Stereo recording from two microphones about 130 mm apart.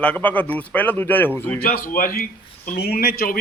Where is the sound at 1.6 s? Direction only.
90° left.